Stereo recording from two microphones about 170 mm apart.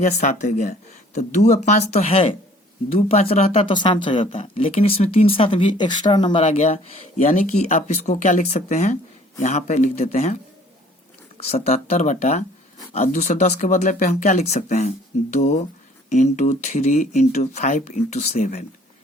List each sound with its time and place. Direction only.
0.0 s speech: 45° left (ahead or behind)
11.3 s speech: 40° left (ahead or behind)